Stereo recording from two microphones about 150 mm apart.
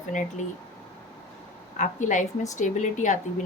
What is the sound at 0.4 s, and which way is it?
Speech, 55° left (ahead or behind).